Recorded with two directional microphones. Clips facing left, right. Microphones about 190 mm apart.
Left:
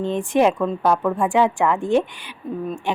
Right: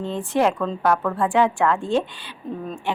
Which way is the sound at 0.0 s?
15° left (ahead or behind).